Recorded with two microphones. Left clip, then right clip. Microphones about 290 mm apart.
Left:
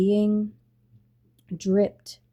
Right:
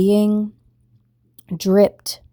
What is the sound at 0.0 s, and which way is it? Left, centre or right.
Speech, right.